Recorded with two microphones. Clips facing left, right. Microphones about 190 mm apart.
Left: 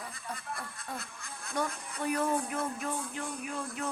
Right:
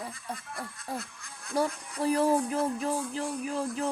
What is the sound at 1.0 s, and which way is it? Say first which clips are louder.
Speech: right 3 dB; 55° left (ahead or behind).